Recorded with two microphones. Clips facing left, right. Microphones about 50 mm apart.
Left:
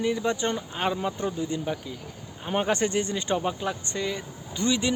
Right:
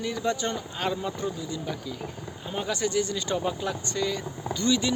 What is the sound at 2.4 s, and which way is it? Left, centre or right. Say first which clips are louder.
Speech: left 4 dB; left.